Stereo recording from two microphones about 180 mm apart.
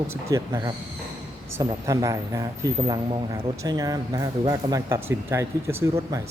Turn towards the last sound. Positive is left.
turn(degrees=-15)  # may be behind; listen again after turning